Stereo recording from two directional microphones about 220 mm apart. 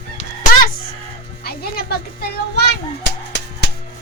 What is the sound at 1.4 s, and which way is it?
Speech, 45° left (ahead or behind).